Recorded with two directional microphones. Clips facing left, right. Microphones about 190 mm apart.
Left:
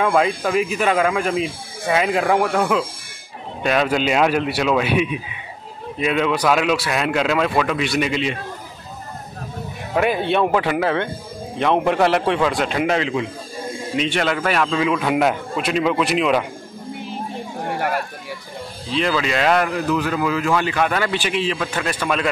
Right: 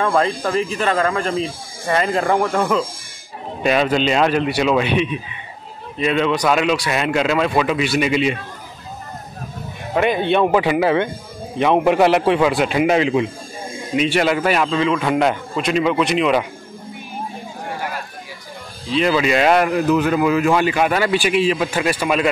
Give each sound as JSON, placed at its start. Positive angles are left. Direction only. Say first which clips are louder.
{"t": 0.0, "sound": "a man's voice", "louder": "even", "side_deg": 5}
{"t": 9.9, "sound": "a man's voice", "louder": "right 2 dB", "side_deg": 0}
{"t": 17.7, "sound": "a sound", "louder": "left 6 dB", "side_deg": 60}
{"t": 18.9, "sound": "speech", "louder": "right 4 dB", "side_deg": -5}